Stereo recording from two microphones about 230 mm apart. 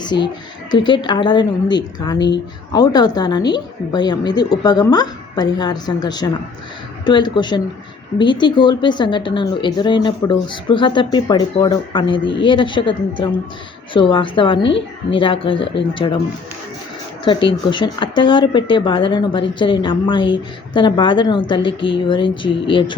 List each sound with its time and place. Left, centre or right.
0.0 s a woman's voice: centre
17.2 s speech: left